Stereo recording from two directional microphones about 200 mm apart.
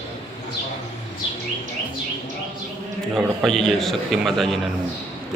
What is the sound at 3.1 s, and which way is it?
A man's voice, centre (ahead or behind).